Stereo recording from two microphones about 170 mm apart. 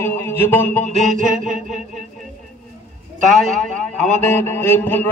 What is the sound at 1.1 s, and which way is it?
Mantra, 50° right (ahead or behind).